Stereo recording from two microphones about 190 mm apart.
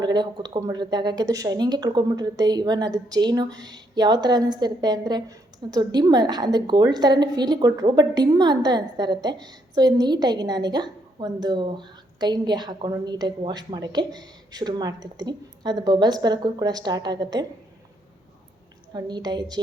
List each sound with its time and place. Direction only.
0.0 s a woman's voice: 20° right (ahead or behind)
18.9 s a woman's voice: 20° right (ahead or behind)